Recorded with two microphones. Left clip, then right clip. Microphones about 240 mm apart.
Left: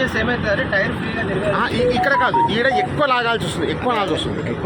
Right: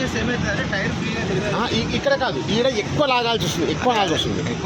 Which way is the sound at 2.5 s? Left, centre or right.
Centre.